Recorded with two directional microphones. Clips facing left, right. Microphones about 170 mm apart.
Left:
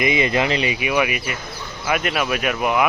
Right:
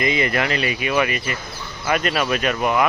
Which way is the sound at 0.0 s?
20° left (ahead or behind).